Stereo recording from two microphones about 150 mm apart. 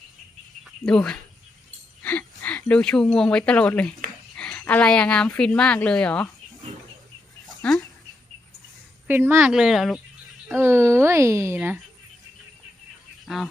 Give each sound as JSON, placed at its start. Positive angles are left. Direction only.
{"t": 0.6, "sound": "a sound", "side_deg": 5}
{"t": 2.0, "sound": "a woman's voice", "side_deg": 10}
{"t": 7.4, "sound": "bird", "side_deg": 0}
{"t": 9.0, "sound": "speech", "side_deg": -15}
{"t": 9.5, "sound": "speech", "side_deg": -5}
{"t": 10.5, "sound": "speech", "side_deg": -15}
{"t": 13.2, "sound": "speech", "side_deg": -5}